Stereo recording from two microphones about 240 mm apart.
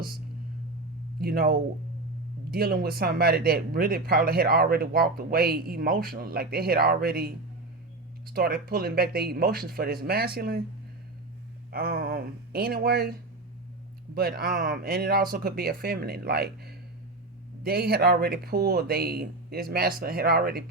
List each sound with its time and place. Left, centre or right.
1.2 s speech: right
11.7 s speech: right
14.2 s speech: right